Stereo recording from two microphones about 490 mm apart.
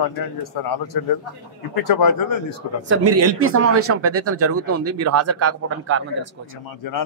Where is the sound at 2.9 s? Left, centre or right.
Right.